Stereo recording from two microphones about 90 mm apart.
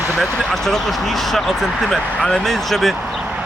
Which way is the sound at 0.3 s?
5° left (ahead or behind).